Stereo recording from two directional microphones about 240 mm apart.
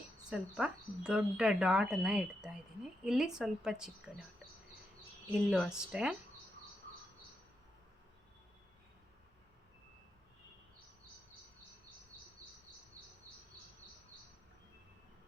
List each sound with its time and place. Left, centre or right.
0.3 s speech: centre
5.3 s speech: centre